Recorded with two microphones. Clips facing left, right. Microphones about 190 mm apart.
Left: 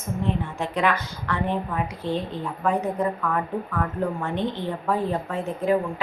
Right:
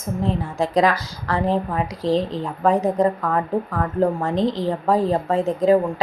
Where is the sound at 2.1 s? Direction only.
90° right.